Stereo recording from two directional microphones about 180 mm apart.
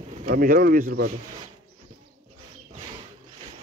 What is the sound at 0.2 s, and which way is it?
Speech, 50° right (ahead or behind).